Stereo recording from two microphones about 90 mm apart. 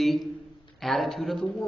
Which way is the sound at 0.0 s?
Centre (ahead or behind).